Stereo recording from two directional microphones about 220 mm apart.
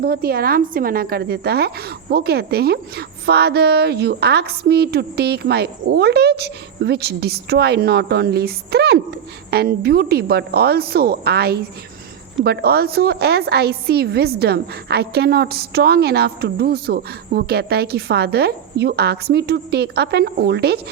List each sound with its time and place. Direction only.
0.0 s a woman's voice: 45° right (ahead or behind)